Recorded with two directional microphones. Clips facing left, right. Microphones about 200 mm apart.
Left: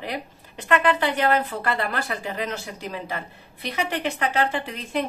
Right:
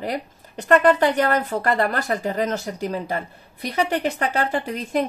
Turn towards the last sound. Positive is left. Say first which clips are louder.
# right 4 dB
turn(degrees=-40)  # may be behind; listen again after turning